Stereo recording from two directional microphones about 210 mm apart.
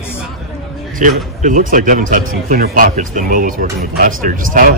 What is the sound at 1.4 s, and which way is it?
Speech, 40° right (ahead or behind).